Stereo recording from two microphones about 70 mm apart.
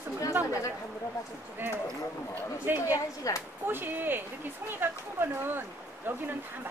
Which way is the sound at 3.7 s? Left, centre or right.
Right.